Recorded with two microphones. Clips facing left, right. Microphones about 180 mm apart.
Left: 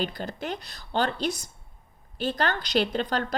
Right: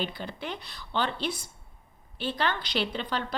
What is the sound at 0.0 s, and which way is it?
A woman's voice, 45° left (ahead or behind).